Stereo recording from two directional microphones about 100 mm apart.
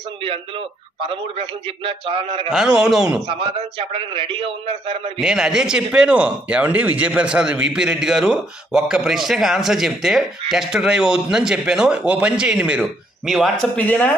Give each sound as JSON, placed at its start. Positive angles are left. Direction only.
{"t": 1.0, "sound": "a man's voice", "side_deg": -60}
{"t": 2.5, "sound": "a man's voice", "side_deg": -5}
{"t": 3.3, "sound": "a man's voice", "side_deg": -60}
{"t": 5.2, "sound": "speech", "side_deg": -5}
{"t": 13.2, "sound": "a man's voice", "side_deg": 0}
{"t": 13.7, "sound": "speech", "side_deg": 15}